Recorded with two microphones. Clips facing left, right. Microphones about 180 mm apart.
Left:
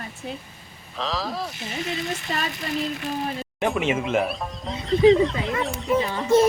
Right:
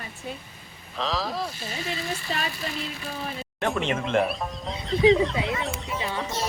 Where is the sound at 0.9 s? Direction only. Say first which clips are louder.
Even; centre (ahead or behind).